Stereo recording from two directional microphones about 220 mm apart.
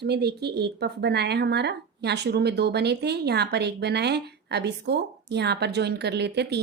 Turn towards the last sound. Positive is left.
turn(degrees=-50)  # may be behind; listen again after turning